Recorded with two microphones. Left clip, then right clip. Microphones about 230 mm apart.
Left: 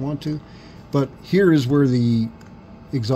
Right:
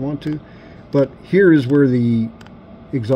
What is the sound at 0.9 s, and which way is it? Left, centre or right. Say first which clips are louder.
Speech: right 5 dB; centre.